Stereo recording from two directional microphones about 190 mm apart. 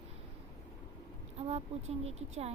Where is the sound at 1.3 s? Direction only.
35° right (ahead or behind).